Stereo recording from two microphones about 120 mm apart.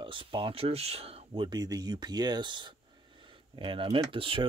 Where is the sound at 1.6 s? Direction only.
30° right (ahead or behind).